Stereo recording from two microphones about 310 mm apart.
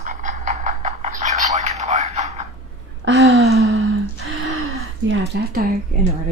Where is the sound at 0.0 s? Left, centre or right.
Right.